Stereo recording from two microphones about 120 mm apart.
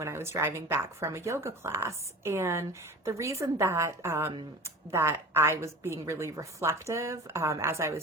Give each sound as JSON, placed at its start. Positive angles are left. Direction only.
{"t": 0.0, "sound": "a woman's voice", "side_deg": -20}